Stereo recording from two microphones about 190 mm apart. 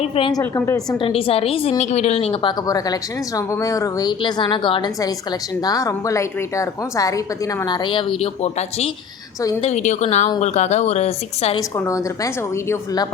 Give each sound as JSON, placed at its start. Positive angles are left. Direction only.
{"t": 0.0, "sound": "a woman's voice", "side_deg": 25}
{"t": 1.0, "sound": "a woman's voice", "side_deg": 30}
{"t": 11.8, "sound": "a woman's voice", "side_deg": 15}